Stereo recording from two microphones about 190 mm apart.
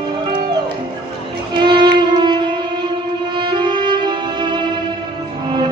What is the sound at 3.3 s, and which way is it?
Music, 25° right (ahead or behind).